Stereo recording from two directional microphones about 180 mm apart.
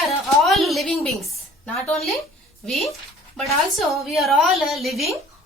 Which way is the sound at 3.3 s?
Centre (ahead or behind).